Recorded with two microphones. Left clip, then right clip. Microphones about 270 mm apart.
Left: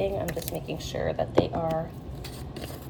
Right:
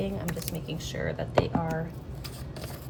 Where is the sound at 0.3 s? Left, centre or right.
Centre.